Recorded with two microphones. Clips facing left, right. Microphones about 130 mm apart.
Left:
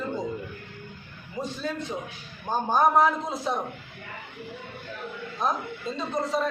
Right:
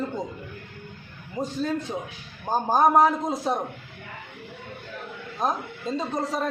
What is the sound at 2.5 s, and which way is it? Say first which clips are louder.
A man's voice: right 2 dB; 40° right (ahead or behind).